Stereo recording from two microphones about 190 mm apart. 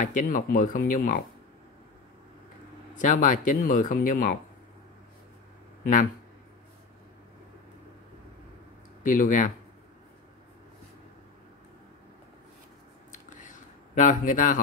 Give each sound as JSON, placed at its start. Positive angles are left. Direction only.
{"t": 0.0, "sound": "speech", "side_deg": 40}
{"t": 3.0, "sound": "speech", "side_deg": 45}
{"t": 9.0, "sound": "speech", "side_deg": 45}
{"t": 13.1, "sound": "computer keyboard", "side_deg": 40}